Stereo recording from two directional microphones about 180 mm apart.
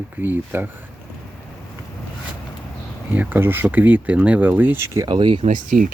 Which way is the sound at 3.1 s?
10° right (ahead or behind).